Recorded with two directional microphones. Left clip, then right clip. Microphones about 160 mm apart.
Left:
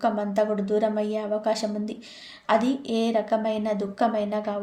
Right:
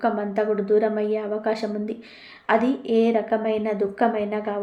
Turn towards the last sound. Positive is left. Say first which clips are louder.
# right 2 dB
turn(degrees=30)  # may be behind; listen again after turning